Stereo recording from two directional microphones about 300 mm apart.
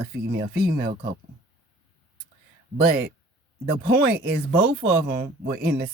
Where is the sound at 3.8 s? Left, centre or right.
Right.